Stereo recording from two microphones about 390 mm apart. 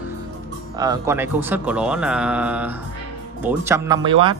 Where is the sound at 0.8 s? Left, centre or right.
Centre.